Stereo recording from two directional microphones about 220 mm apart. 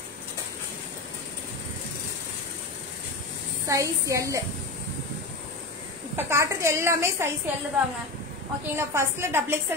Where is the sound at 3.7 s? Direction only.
15° right (ahead or behind).